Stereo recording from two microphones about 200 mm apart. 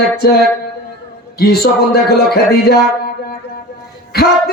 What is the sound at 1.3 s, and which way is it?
Speech, 50° left (ahead or behind).